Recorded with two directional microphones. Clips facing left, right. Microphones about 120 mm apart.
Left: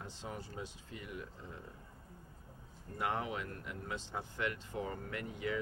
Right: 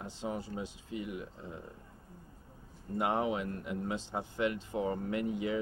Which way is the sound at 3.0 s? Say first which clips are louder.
Right 6 dB; 20° right (ahead or behind).